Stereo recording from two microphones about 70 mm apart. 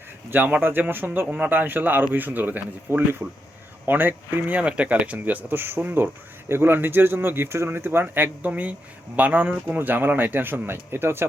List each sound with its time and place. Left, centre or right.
0.3 s speech: right